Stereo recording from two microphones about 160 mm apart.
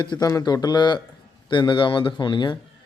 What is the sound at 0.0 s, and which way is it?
A man's voice, 25° left (ahead or behind).